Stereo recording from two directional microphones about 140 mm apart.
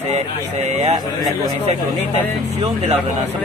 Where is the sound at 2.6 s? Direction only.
50° right (ahead or behind).